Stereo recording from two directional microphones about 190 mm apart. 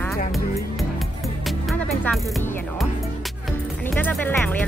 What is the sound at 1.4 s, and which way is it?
Music, 5° left (ahead or behind).